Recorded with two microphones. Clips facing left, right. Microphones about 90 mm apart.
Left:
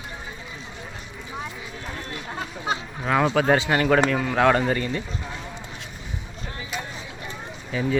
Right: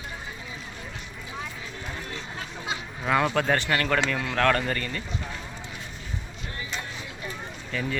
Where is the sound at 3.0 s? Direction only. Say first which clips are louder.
Left 2 dB; centre (ahead or behind).